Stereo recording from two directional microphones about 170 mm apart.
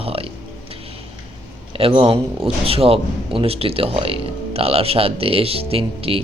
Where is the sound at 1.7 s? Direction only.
35° right (ahead or behind).